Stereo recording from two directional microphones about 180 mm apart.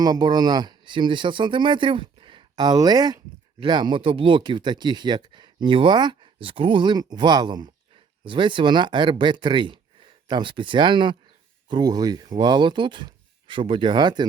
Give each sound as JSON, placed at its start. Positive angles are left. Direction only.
{"t": 0.0, "sound": "speech", "side_deg": -25}